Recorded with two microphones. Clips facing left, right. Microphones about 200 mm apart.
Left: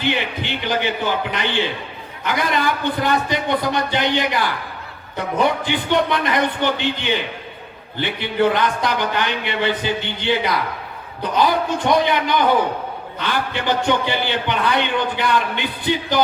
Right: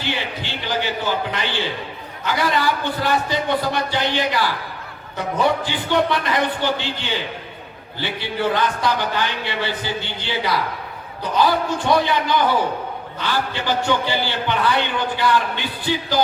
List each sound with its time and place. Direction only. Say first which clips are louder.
0.0 s a man's voice: left 4 dB; 20° left (ahead or behind)